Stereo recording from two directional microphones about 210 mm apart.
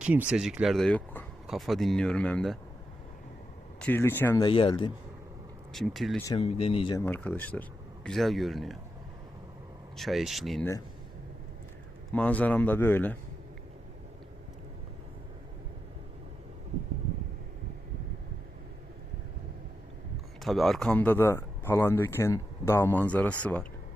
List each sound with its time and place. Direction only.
0.0 s speech: 5° right (ahead or behind)
3.8 s speech: 10° left (ahead or behind)
4.4 s speech: 25° left (ahead or behind)
5.7 s speech: centre (ahead or behind)
6.2 s speech: 25° left (ahead or behind)
7.0 s speech: 5° left (ahead or behind)
10.0 s speech: centre (ahead or behind)
12.1 s speech: 5° left (ahead or behind)
20.4 s speech: centre (ahead or behind)